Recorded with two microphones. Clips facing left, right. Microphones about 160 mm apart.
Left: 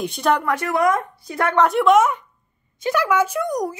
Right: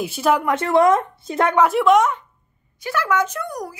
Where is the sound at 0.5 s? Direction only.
25° right (ahead or behind).